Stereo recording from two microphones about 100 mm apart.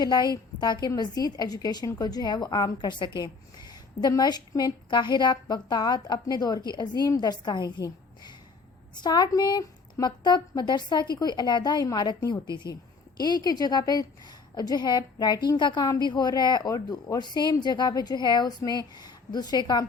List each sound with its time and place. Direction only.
0.0 s a woman's voice: 45° left (ahead or behind)